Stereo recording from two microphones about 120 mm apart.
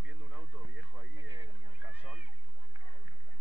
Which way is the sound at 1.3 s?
35° right (ahead or behind).